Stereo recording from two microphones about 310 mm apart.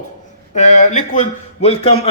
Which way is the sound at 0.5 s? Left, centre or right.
Left.